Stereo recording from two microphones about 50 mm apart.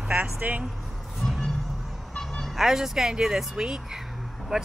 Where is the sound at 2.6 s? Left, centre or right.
Centre.